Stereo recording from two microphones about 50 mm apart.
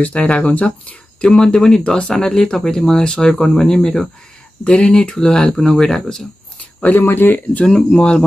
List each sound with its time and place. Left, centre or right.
0.0 s speech: left; by 6.2 s centre
6.8 s speech: left
7.6 s speech: centre